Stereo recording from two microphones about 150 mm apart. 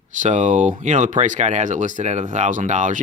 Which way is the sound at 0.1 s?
55° right (ahead or behind).